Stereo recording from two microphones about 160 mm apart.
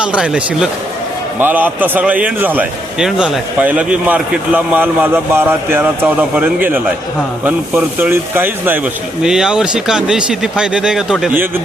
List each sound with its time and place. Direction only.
0.0 s a man's voice: 5° right (ahead or behind)